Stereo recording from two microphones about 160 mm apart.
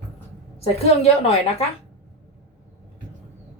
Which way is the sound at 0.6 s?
40° left (ahead or behind).